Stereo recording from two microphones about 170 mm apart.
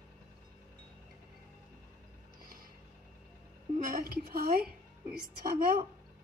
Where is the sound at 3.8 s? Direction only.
55° right (ahead or behind).